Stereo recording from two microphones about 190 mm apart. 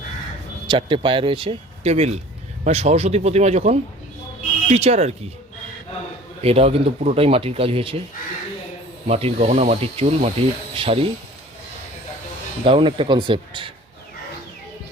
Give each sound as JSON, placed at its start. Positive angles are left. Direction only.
{"t": 0.7, "sound": "speech", "side_deg": -25}
{"t": 6.4, "sound": "speech", "side_deg": -30}
{"t": 9.0, "sound": "speech", "side_deg": -30}
{"t": 12.6, "sound": "speech", "side_deg": -30}